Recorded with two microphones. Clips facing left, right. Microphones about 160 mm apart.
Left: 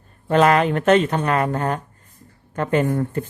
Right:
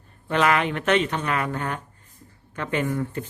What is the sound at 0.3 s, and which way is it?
Speech, 40° left (ahead or behind).